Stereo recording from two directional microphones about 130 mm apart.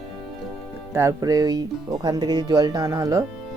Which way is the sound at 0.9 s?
25° right (ahead or behind).